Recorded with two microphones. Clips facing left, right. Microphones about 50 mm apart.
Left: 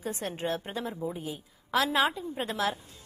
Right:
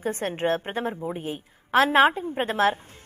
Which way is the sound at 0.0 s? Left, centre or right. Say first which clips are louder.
Right 7 dB; right.